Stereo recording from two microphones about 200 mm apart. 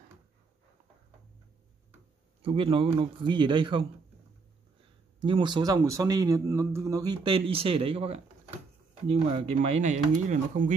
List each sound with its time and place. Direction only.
2.4 s speech: 25° right (ahead or behind)
5.2 s speech: 25° right (ahead or behind)